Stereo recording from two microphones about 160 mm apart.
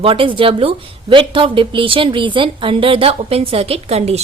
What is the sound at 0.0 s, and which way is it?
Speech, 35° right (ahead or behind).